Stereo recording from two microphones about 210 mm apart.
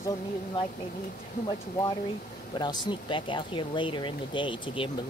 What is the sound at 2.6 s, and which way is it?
Speech, 20° left (ahead or behind).